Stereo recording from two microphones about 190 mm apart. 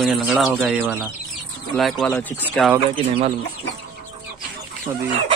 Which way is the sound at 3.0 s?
30° right (ahead or behind).